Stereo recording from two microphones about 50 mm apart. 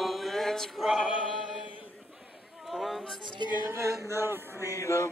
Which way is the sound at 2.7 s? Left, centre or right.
Centre.